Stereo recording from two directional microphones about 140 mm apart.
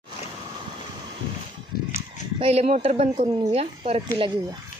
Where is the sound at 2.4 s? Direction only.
45° right (ahead or behind).